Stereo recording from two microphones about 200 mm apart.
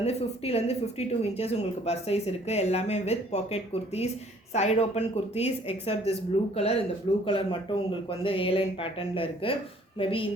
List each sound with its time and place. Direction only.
0.0 s speech: 30° left (ahead or behind)